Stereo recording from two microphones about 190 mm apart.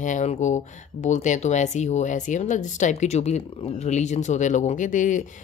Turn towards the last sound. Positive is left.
turn(degrees=40)  # may be behind; listen again after turning